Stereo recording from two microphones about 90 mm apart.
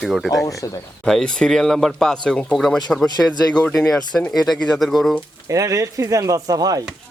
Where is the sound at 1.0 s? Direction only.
5° left (ahead or behind).